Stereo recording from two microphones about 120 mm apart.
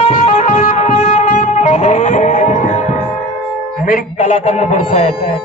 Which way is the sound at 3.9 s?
85° left.